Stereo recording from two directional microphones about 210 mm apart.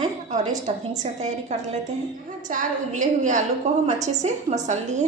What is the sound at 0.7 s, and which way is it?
A woman's voice, 30° right (ahead or behind).